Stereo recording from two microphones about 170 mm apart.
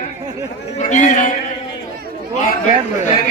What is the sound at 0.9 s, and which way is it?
Speech, 50° left (ahead or behind).